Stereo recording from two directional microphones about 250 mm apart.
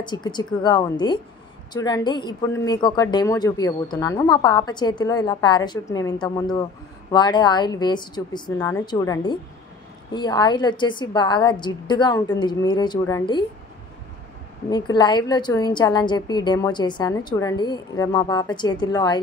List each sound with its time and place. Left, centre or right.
0.0 s speech: centre
14.7 s speech: centre